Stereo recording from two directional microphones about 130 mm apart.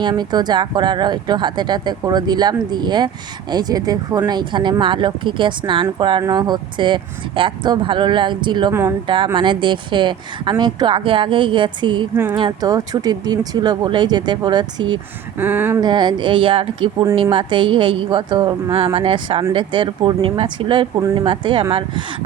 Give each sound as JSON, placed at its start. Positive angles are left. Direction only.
{"t": 0.0, "sound": "speech", "side_deg": -35}
{"t": 8.7, "sound": "speech", "side_deg": -20}
{"t": 9.0, "sound": "speech", "side_deg": -40}
{"t": 12.1, "sound": "speech", "side_deg": -20}
{"t": 12.4, "sound": "speech", "side_deg": -35}
{"t": 15.4, "sound": "speech", "side_deg": -15}
{"t": 15.8, "sound": "speech", "side_deg": -35}